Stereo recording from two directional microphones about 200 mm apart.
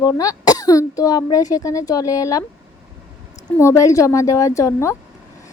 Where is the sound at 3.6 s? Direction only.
15° left (ahead or behind).